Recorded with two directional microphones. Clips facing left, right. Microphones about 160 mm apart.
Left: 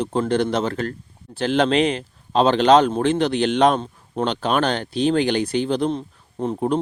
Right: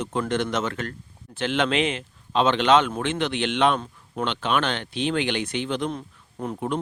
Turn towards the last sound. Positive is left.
turn(degrees=30)  # may be behind; listen again after turning